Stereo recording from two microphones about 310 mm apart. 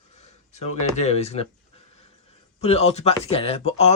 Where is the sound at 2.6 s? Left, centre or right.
Centre.